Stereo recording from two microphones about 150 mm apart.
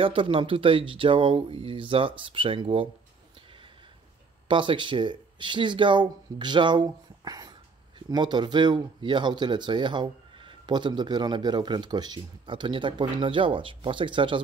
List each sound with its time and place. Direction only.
0.0 s speech: 35° right (ahead or behind)
4.5 s speech: 35° right (ahead or behind)